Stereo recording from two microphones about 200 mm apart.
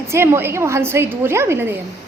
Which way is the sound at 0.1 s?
10° right (ahead or behind).